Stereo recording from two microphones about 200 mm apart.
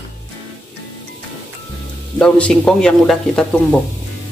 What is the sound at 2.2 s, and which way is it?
A man's voice, 5° left (ahead or behind).